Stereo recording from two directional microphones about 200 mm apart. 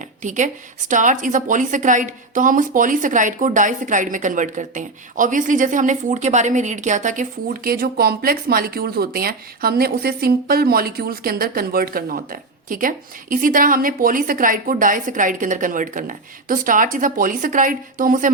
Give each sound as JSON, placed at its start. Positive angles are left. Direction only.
{"t": 0.2, "sound": "a woman's voice", "side_deg": -40}